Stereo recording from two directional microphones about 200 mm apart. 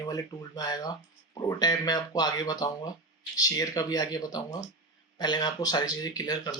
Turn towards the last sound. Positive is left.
turn(degrees=20)  # may be behind; listen again after turning